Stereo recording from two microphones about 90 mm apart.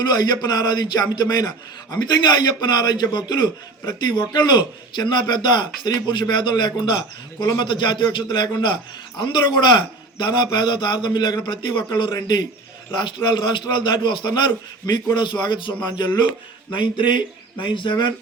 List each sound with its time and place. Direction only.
0.1 s speech: 50° left (ahead or behind)
13.0 s speech: 60° left (ahead or behind)